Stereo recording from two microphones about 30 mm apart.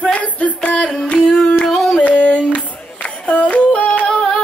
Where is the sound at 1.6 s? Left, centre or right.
Centre.